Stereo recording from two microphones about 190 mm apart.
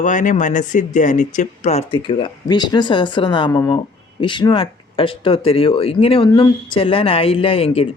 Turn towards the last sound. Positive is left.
turn(degrees=30)  # may be behind; listen again after turning